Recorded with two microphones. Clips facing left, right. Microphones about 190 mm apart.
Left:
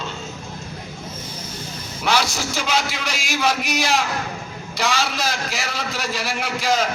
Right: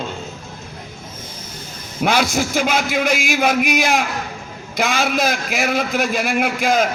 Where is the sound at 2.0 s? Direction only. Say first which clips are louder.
Right 4 dB; 55° right (ahead or behind).